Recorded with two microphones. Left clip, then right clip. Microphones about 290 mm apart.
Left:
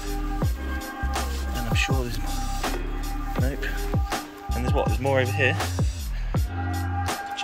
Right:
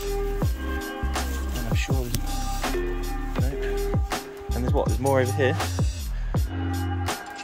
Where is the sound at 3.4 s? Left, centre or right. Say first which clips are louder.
Right 2 dB; centre.